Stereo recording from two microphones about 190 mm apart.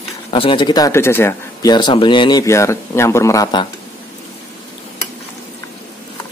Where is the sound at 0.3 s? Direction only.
25° left (ahead or behind).